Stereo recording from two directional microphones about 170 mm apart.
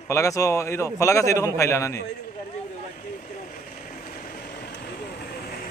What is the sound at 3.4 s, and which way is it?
Vehicle, 45° left (ahead or behind).